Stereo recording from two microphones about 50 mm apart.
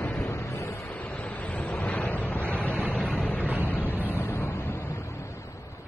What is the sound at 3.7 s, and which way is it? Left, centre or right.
Vehicle, left.